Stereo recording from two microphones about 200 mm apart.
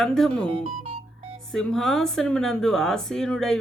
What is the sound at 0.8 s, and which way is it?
Music, 30° right (ahead or behind).